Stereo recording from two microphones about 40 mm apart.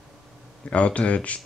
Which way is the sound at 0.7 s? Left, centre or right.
Left.